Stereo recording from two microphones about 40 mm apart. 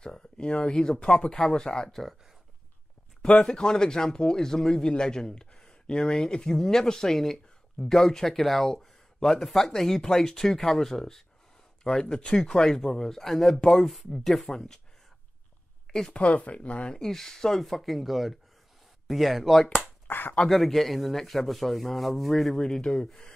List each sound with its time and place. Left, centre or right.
0.0 s speech: left
1.9 s speech: centre
3.2 s speech: left
13.8 s speech: centre
16.1 s speech: left
16.9 s speech: centre
20.1 s speech: left
20.4 s speech: centre
22.5 s speech: centre